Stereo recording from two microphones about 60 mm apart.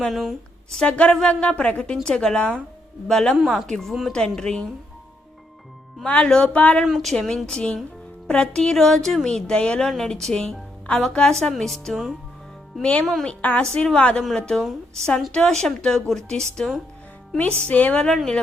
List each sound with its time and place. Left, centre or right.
0.1 s speech: centre
0.7 s speech: centre
6.1 s speech: centre
6.8 s speech: centre
7.1 s speech: centre
12.8 s speech: left
13.6 s speech: centre
14.6 s speech: centre
15.3 s speech: centre
17.3 s speech: left